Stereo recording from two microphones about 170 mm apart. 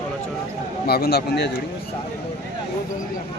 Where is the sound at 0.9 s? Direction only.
65° left (ahead or behind).